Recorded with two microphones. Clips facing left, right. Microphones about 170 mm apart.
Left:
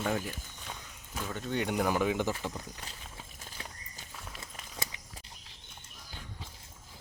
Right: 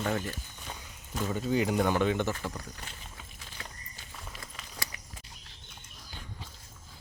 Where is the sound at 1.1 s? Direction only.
5° right (ahead or behind); by 2.6 s 15° left (ahead or behind).